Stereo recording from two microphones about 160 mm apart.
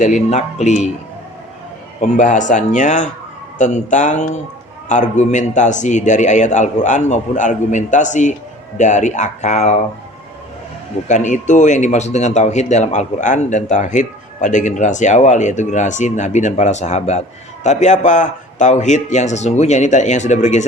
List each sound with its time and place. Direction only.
0.0 s speech: 45° left (ahead or behind)
2.0 s speech: 50° left (ahead or behind)
11.1 s speech: 50° left (ahead or behind)